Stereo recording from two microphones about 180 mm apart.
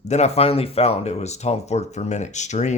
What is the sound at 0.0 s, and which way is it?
Speech, 40° left (ahead or behind).